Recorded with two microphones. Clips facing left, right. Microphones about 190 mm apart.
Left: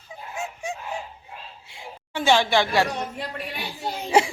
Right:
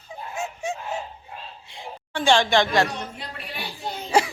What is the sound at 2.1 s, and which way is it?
Speech, 10° left (ahead or behind).